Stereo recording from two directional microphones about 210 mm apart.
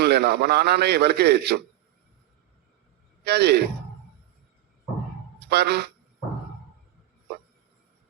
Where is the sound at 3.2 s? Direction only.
50° right (ahead or behind).